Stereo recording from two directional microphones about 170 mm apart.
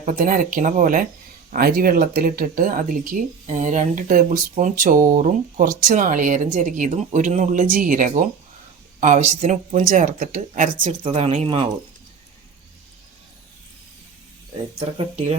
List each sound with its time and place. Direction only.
0.0 s speech: 50° right (ahead or behind)
1.5 s speech: 65° right (ahead or behind)
11.0 s speech: 35° right (ahead or behind)